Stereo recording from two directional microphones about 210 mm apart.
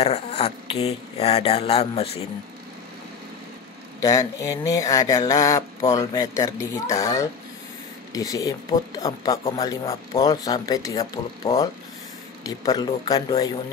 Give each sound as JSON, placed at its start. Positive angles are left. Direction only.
{"t": 0.0, "sound": "speech", "side_deg": 30}
{"t": 4.0, "sound": "speech", "side_deg": 15}